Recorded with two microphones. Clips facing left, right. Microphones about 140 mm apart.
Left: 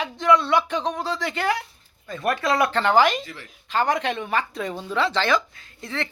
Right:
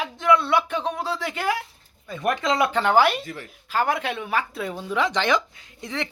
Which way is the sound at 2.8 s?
10° right (ahead or behind).